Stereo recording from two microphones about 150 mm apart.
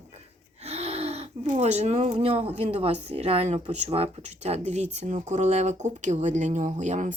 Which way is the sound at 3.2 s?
45° right (ahead or behind).